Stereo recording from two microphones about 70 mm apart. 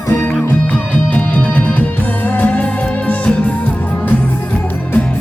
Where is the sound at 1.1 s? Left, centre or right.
Left.